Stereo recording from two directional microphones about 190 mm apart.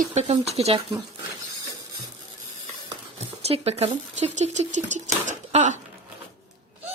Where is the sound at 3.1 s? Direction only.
35° right (ahead or behind).